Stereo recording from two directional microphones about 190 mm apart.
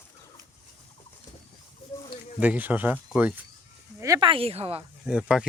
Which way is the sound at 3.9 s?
20° right (ahead or behind).